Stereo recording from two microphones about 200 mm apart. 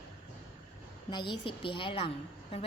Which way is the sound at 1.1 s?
20° left (ahead or behind).